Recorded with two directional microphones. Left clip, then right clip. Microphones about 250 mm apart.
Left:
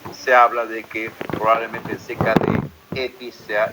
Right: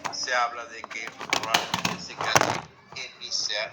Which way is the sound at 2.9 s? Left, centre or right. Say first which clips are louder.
Left 11 dB; left.